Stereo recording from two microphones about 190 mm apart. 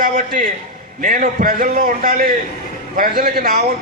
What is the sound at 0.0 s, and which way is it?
A man's voice, 50° right (ahead or behind).